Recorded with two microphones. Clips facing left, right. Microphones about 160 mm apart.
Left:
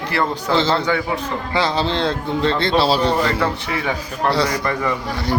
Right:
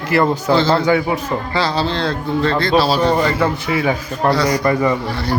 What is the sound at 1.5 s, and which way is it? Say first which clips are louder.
A man's voice: left 1 dB; 20° left (ahead or behind).